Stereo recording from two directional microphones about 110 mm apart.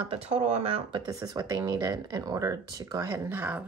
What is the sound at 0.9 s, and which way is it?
Speech, 35° right (ahead or behind).